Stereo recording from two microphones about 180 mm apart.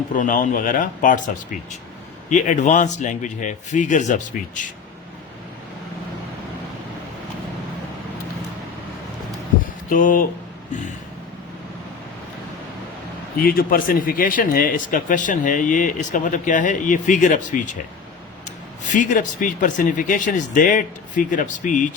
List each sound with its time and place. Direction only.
0.1 s speech: 50° left (ahead or behind)
2.3 s speech: 45° left (ahead or behind)
9.9 s speech: 50° left (ahead or behind)
13.4 s speech: 55° left (ahead or behind)
18.9 s speech: 45° left (ahead or behind)